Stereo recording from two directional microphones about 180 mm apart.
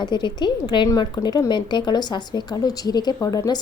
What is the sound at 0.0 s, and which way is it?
A woman's voice, 25° left (ahead or behind).